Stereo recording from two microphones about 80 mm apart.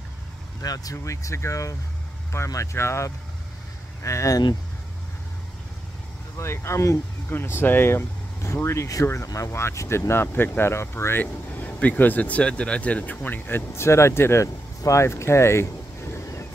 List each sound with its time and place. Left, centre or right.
0.6 s speech: left
6.3 s speech: left